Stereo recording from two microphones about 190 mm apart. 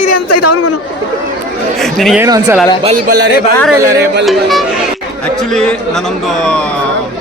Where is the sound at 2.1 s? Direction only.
15° right (ahead or behind).